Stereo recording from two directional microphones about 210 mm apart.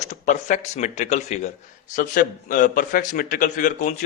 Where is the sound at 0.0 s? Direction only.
35° left (ahead or behind).